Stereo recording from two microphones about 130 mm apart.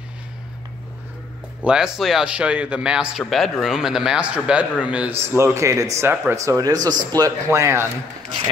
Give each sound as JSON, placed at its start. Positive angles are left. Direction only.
{"t": 1.6, "sound": "a man's voice", "side_deg": -5}
{"t": 5.2, "sound": "speech", "side_deg": -20}